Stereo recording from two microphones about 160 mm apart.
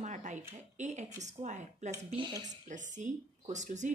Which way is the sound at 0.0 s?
50° right (ahead or behind).